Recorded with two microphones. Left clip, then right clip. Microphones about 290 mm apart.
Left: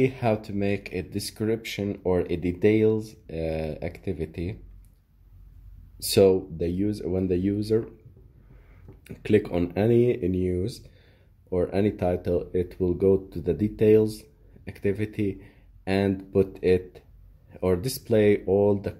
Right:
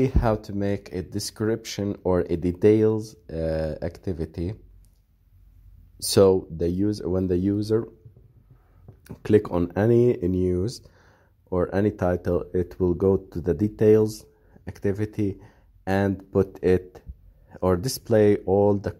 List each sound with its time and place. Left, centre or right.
0.0 s speech: right
5.9 s speech: right
9.0 s speech: right